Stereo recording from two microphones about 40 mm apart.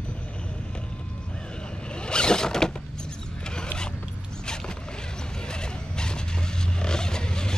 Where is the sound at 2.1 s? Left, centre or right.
Left.